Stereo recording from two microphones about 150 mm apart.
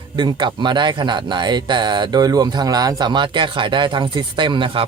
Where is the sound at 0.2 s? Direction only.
30° right (ahead or behind).